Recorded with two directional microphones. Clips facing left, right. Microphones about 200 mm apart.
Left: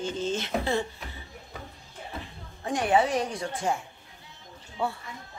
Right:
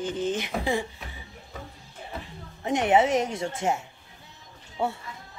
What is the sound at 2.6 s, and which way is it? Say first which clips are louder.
A woman's voice: right 3 dB; 20° right (ahead or behind).